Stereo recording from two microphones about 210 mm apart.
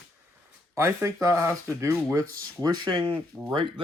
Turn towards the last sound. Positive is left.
turn(degrees=0)  # may be behind; listen again after turning